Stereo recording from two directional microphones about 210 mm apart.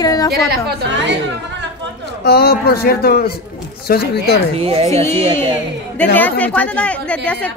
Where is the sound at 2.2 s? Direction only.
50° left (ahead or behind).